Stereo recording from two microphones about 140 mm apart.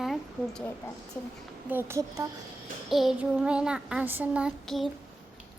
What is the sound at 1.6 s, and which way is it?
Speech, 15° right (ahead or behind).